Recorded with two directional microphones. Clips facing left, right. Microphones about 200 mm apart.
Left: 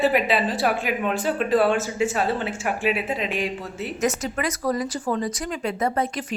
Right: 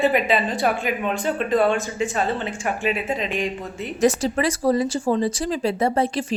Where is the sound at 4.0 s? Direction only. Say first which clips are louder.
Right 6 dB; 30° right (ahead or behind).